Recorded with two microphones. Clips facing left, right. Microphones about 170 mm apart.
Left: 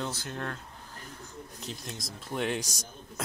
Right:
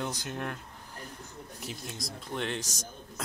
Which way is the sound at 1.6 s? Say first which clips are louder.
Right 1 dB; 5° right (ahead or behind).